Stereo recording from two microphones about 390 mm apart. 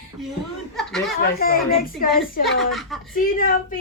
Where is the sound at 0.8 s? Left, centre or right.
Centre.